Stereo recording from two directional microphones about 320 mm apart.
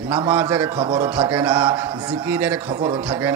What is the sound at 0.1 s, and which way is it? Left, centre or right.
A man's voice, centre.